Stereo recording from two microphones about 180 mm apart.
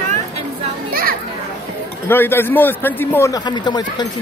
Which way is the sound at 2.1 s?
10° left (ahead or behind).